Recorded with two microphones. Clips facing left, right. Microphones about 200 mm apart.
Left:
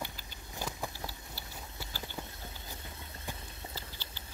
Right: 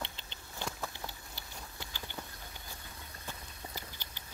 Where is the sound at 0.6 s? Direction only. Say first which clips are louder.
Left 1 dB; 15° left (ahead or behind).